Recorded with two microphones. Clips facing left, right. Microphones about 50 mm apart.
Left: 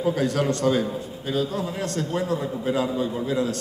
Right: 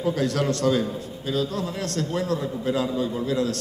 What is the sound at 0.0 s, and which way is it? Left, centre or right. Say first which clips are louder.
A man's voice: left 1 dB; centre.